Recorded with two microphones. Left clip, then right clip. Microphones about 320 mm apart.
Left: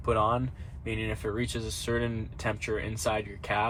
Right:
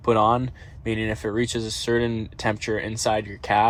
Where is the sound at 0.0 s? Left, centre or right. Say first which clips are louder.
Right 7 dB; centre.